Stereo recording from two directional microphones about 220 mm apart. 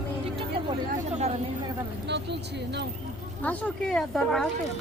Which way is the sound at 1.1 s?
30° right (ahead or behind).